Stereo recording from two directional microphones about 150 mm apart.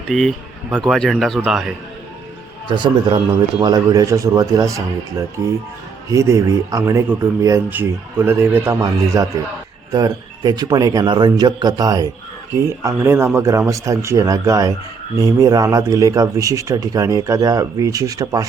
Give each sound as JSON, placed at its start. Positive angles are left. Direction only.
{"t": 0.1, "sound": "a man's voice", "side_deg": 0}
{"t": 2.6, "sound": "speech", "side_deg": -30}